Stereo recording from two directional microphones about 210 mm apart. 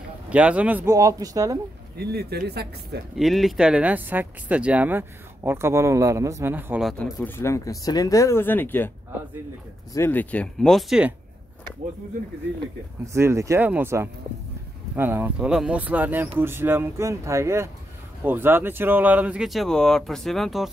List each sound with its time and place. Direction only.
0.3 s speech: 5° right (ahead or behind)
2.0 s speech: 50° right (ahead or behind)
3.2 s speech: centre (ahead or behind)
9.9 s speech: 10° left (ahead or behind)
13.0 s speech: 15° right (ahead or behind)